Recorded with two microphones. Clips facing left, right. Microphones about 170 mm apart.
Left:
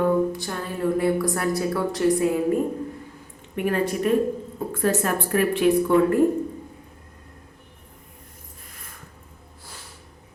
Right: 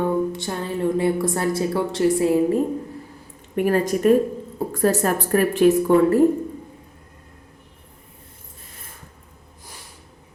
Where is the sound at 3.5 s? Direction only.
40° right (ahead or behind).